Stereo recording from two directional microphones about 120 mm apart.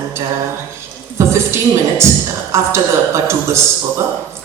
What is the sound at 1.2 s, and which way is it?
A woman's voice, 20° right (ahead or behind).